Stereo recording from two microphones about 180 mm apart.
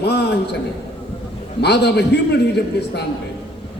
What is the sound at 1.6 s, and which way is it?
Speech, 70° left (ahead or behind).